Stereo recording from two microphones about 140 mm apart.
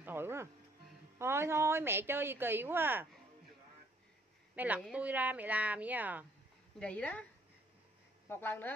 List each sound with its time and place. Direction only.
0.0 s music: 15° right (ahead or behind)
1.1 s a woman's voice: 20° right (ahead or behind)
4.6 s a woman's voice: 10° right (ahead or behind)
6.8 s a woman's voice: 10° left (ahead or behind)
8.3 s a woman's voice: 15° left (ahead or behind)